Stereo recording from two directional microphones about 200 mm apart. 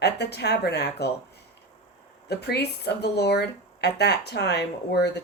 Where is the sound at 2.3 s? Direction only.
55° left (ahead or behind).